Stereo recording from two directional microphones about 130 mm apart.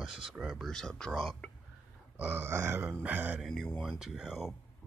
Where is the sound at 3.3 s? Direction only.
Centre (ahead or behind).